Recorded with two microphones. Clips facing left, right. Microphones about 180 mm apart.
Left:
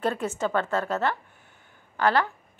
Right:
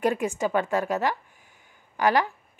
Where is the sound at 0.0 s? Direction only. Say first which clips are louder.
Right 2 dB; 15° right (ahead or behind).